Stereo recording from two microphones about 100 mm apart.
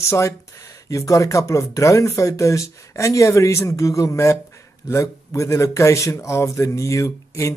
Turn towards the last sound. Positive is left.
turn(degrees=30)  # may be behind; listen again after turning